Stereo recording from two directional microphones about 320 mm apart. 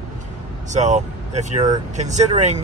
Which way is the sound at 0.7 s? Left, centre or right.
Right.